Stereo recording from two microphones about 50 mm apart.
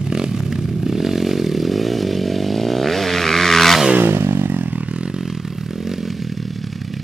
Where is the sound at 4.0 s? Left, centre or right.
Right.